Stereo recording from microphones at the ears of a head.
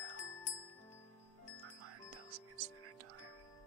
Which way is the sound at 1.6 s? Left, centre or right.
Right.